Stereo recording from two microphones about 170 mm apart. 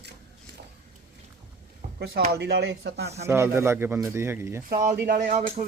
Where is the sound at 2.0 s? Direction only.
75° right (ahead or behind).